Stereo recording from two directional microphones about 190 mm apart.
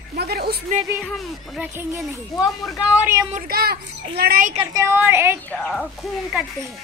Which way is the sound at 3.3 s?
50° right (ahead or behind).